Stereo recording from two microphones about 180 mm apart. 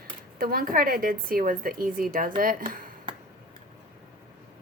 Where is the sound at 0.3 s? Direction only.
55° right (ahead or behind).